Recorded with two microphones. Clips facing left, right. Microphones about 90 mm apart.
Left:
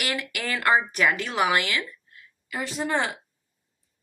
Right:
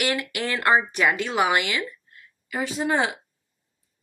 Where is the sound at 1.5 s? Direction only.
35° right (ahead or behind).